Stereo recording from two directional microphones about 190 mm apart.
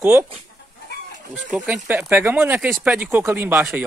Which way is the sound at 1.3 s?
5° right (ahead or behind).